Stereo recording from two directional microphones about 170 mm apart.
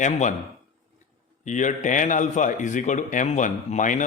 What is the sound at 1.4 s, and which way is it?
A man's voice, 45° left (ahead or behind).